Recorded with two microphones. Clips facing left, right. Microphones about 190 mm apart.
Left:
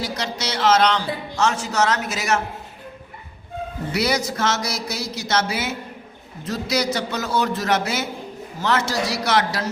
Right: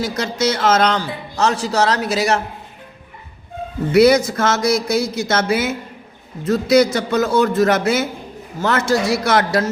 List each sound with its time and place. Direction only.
0.0 s speech: 50° right (ahead or behind)
3.9 s speech: 50° right (ahead or behind)